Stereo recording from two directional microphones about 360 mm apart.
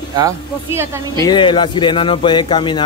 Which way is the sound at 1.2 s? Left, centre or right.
Centre.